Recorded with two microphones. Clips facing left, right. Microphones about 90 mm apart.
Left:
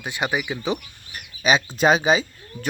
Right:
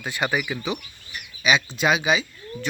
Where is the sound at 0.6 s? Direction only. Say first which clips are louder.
Left 3 dB; 35° left (ahead or behind).